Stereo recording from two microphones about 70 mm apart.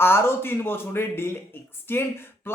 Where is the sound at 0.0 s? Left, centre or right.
Left.